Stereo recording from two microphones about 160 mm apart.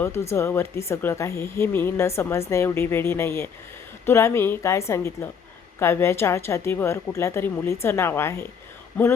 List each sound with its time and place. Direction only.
0.0 s speech: 15° left (ahead or behind)